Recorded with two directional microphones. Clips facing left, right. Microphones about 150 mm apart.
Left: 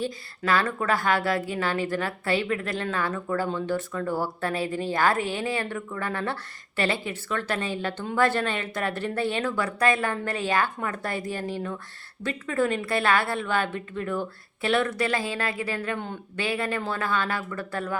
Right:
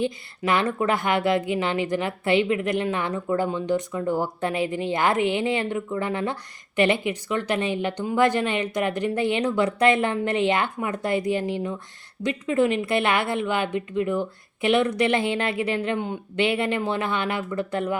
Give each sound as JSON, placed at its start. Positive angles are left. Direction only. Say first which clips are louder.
{"t": 0.0, "sound": "a woman's voice", "louder": "right 4 dB", "side_deg": -20}